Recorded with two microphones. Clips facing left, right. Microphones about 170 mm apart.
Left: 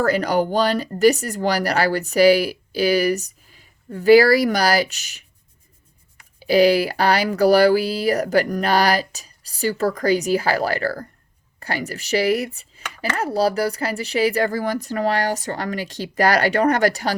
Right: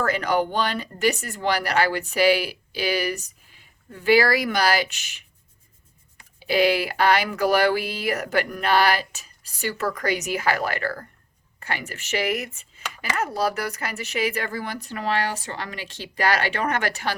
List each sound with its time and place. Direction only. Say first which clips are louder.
0.0 s speech: left 4 dB; 40° left (ahead or behind)
6.4 s speech: left 5 dB; 40° left (ahead or behind)